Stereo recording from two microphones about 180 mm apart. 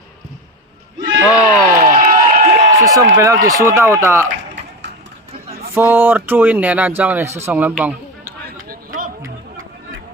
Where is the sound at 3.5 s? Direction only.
15° right (ahead or behind).